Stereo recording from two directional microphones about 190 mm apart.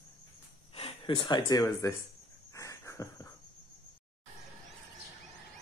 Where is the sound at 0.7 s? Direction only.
30° left (ahead or behind).